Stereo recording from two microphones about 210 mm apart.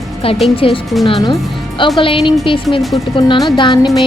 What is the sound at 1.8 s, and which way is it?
Speech, 25° left (ahead or behind).